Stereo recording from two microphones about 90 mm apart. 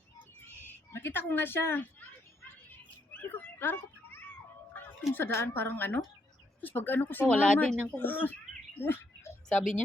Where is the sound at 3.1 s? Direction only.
20° left (ahead or behind).